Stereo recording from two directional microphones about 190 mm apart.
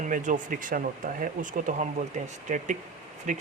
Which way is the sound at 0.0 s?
40° right (ahead or behind).